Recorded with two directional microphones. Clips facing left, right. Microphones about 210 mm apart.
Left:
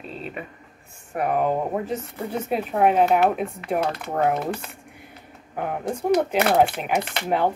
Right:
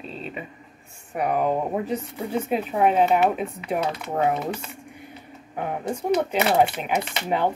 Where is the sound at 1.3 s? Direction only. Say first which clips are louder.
Even; centre (ahead or behind).